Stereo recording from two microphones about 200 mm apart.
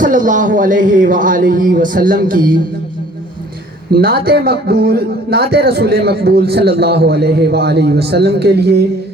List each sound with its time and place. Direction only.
0.0 s speech: 40° right (ahead or behind)
3.9 s a man's voice: 50° right (ahead or behind)